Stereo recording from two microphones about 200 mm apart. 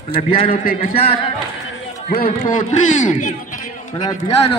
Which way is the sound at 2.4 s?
35° left (ahead or behind).